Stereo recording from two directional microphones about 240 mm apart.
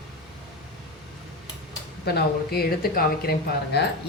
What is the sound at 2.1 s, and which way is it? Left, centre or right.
Speech, left.